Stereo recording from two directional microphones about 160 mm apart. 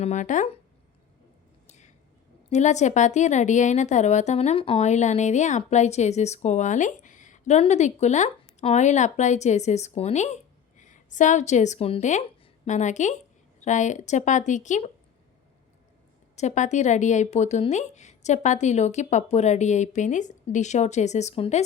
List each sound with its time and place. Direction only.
0.0 s a woman's voice: 50° left (ahead or behind)
1.6 s a sound: 45° left (ahead or behind)
2.5 s a woman's voice: 45° left (ahead or behind)
16.3 s a woman's voice: 45° left (ahead or behind)